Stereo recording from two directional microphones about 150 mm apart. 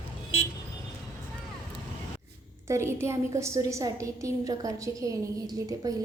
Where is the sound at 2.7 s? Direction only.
15° right (ahead or behind).